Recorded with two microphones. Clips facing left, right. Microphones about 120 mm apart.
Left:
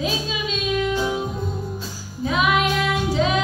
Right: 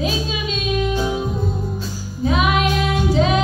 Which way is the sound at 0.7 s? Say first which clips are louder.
Right 1 dB; 20° right (ahead or behind).